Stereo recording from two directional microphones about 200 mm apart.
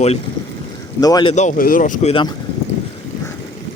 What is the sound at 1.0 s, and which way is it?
Speech, 20° left (ahead or behind).